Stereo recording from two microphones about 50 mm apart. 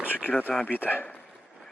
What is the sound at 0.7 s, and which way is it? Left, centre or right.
Speech, left.